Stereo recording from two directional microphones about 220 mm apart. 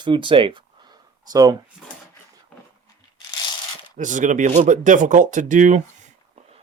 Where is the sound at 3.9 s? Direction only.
35° right (ahead or behind).